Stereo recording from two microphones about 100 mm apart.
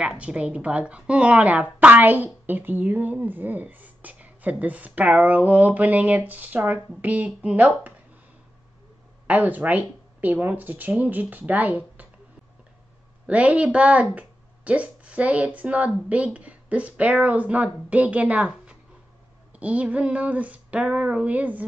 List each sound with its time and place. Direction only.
0.0 s speech: 10° right (ahead or behind)
9.3 s speech: 15° right (ahead or behind)
13.3 s speech: 15° right (ahead or behind)